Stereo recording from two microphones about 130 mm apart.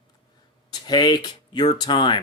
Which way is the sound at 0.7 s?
35° left (ahead or behind).